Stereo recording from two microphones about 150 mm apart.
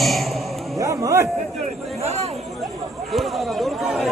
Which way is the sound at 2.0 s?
45° right (ahead or behind).